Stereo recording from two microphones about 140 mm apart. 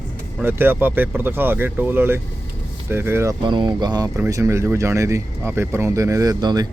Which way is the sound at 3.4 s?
35° right (ahead or behind).